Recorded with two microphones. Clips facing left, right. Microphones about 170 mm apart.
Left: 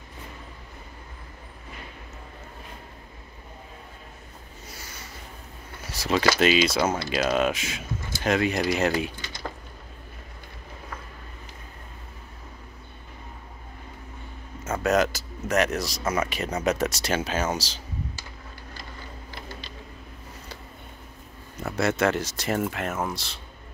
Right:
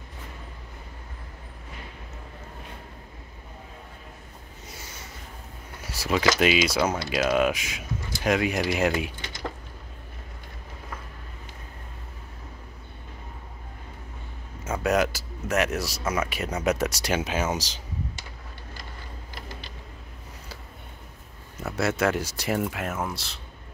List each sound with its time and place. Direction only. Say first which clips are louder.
5.9 s a sound: left 1 dB; 10° right (ahead or behind)
6.2 s speech: left 1 dB; 10° right (ahead or behind)
14.6 s speech: left 1 dB; 10° right (ahead or behind)
21.6 s speech: left 1 dB; 5° right (ahead or behind)